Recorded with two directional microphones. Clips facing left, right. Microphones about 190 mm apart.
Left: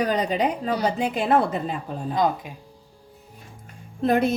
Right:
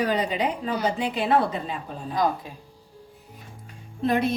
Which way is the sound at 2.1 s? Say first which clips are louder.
Left 2 dB; 20° left (ahead or behind).